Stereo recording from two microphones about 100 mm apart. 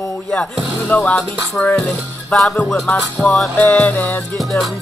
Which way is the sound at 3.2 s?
Centre (ahead or behind).